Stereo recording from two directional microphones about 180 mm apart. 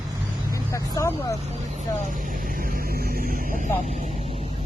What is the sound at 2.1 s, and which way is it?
Speech, 50° right (ahead or behind).